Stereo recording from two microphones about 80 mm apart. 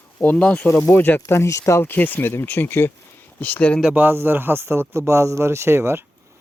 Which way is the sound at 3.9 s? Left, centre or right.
Right.